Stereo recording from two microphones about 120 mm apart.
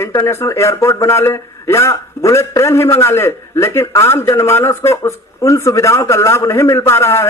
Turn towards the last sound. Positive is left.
turn(degrees=20)  # may be behind; listen again after turning